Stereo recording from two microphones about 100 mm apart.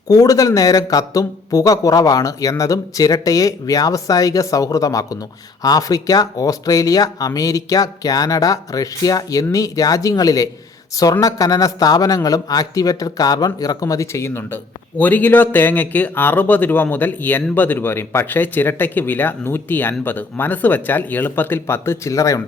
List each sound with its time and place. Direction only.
0.1 s a man's voice: 35° left (ahead or behind)